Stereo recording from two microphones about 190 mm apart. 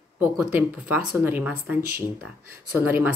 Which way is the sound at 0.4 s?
10° right (ahead or behind).